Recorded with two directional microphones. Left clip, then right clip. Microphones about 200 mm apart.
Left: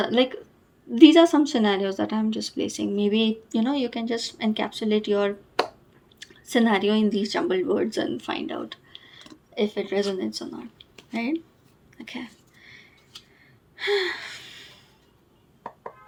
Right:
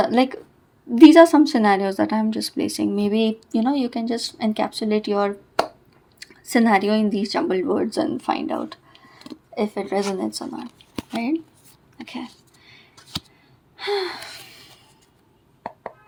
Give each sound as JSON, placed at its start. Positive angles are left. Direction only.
{"t": 0.0, "sound": "a woman's voice", "side_deg": -35}
{"t": 12.0, "sound": "a sound", "side_deg": -20}
{"t": 13.7, "sound": "gasp", "side_deg": -20}